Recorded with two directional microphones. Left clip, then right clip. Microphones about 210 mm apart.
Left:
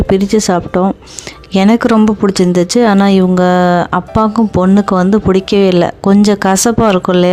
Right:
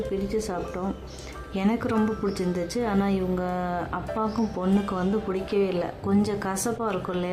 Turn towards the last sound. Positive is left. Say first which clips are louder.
# left 18 dB
turn(degrees=45)  # may be behind; listen again after turning